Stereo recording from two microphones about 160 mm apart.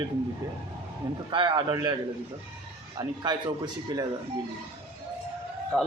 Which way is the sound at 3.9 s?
25° right (ahead or behind).